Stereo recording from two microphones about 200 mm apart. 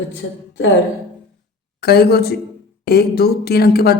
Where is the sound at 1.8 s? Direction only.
50° left (ahead or behind).